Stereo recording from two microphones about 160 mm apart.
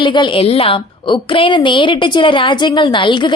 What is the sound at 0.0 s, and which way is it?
A woman's voice, 30° left (ahead or behind).